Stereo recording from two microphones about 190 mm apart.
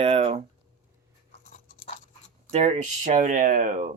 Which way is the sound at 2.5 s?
35° right (ahead or behind).